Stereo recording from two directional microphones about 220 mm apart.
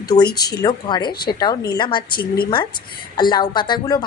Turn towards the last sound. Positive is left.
turn(degrees=20)  # may be behind; listen again after turning